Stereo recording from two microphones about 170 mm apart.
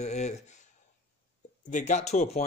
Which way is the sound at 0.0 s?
40° left (ahead or behind).